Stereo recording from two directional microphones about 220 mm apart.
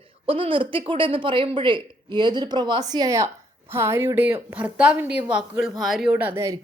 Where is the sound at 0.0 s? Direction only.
25° right (ahead or behind).